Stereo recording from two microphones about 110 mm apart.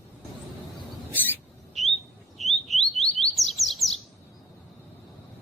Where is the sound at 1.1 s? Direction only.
15° left (ahead or behind).